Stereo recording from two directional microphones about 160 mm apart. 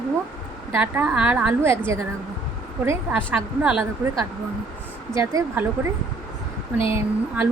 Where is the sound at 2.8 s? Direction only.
15° right (ahead or behind).